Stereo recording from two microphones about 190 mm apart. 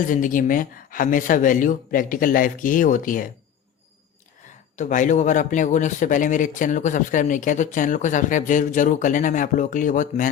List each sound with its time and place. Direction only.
0.0 s speech: 45° left (ahead or behind)
4.8 s speech: 40° left (ahead or behind)